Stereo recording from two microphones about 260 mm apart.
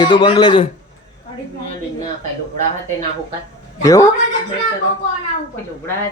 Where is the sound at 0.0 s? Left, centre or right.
Centre.